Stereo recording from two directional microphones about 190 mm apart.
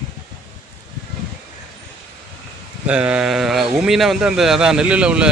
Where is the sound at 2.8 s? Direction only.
5° right (ahead or behind).